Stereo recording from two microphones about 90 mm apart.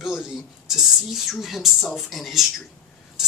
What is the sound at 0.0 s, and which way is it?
Speech, 5° right (ahead or behind).